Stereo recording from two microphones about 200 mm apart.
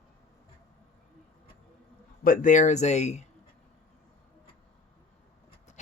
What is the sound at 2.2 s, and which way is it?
Speech, 45° left (ahead or behind).